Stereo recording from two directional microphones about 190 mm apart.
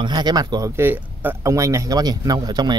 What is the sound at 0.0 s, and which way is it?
Speech, 20° right (ahead or behind).